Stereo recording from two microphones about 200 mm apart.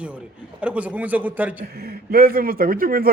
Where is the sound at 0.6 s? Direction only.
5° right (ahead or behind).